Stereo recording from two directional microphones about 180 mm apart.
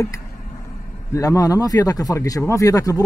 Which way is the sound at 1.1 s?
20° left (ahead or behind).